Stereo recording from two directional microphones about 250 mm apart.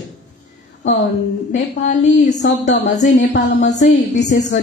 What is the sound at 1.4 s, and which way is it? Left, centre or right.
A woman's voice, left.